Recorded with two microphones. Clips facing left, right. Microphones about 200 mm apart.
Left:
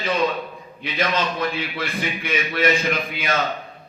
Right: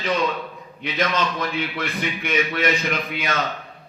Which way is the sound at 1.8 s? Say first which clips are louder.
Even; 30° left (ahead or behind).